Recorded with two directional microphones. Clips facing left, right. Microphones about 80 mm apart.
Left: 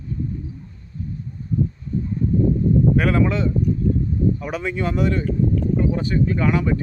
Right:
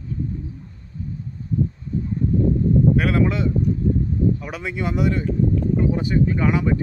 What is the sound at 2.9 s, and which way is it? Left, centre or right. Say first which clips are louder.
Speech: left 1 dB; centre.